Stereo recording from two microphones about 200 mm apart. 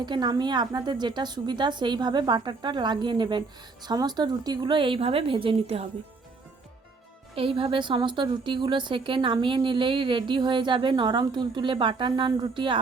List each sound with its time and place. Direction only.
0.0 s a woman's voice: 20° right (ahead or behind)
7.3 s a woman's voice: 25° right (ahead or behind)